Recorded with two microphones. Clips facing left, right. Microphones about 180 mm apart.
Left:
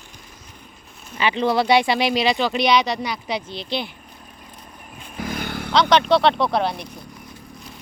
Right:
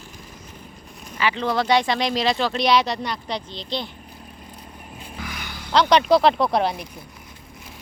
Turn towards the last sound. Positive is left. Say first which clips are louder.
# even
turn(degrees=0)  # may be behind; listen again after turning